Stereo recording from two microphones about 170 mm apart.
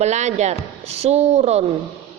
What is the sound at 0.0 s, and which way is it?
A woman's voice, 40° right (ahead or behind).